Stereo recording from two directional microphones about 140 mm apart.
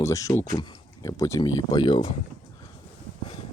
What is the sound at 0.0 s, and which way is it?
Speech, 25° left (ahead or behind).